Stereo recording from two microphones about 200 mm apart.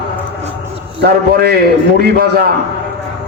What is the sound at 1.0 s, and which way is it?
A man's voice, 50° right (ahead or behind).